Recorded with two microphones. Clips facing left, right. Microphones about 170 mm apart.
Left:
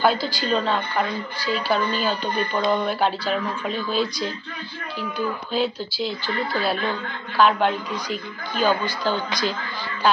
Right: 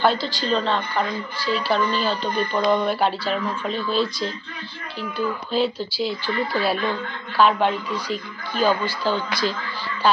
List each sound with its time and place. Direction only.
0.0 s a woman's voice: centre (ahead or behind)
5.5 s a woman's voice: 5° right (ahead or behind)